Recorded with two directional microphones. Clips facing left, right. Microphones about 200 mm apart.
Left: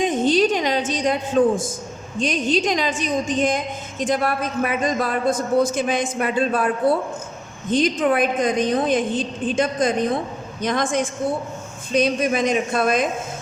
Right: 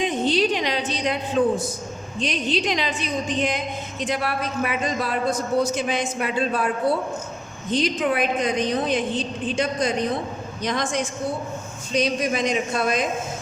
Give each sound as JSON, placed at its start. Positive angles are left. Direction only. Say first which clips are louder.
{"t": 0.0, "sound": "a sound", "louder": "left 3 dB", "side_deg": 45}
{"t": 1.4, "sound": "a man's voice", "louder": "left 2 dB", "side_deg": 45}
{"t": 7.7, "sound": "a man's voice", "louder": "left 4 dB", "side_deg": 50}